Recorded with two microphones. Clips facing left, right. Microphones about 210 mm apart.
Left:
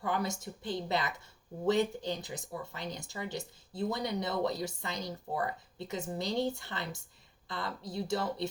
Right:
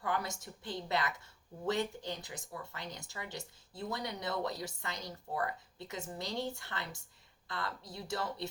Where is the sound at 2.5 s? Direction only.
20° left (ahead or behind).